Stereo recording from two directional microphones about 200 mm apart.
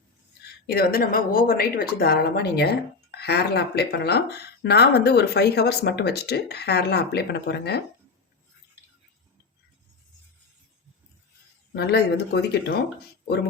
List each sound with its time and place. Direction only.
0.4 s a woman's voice: 50° left (ahead or behind)
11.7 s speech: 55° left (ahead or behind)